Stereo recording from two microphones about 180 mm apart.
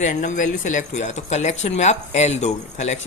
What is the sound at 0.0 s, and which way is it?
Speech, 45° left (ahead or behind).